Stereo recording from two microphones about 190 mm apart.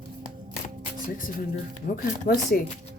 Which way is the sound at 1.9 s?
55° left (ahead or behind).